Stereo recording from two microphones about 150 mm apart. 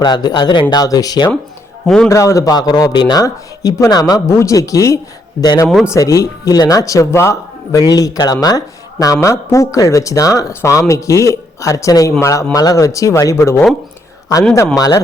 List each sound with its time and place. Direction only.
0.0 s a man's voice: 30° left (ahead or behind)
5.6 s speech: centre (ahead or behind)
5.9 s a man's voice: 20° left (ahead or behind)
14.8 s a man's voice: 25° left (ahead or behind)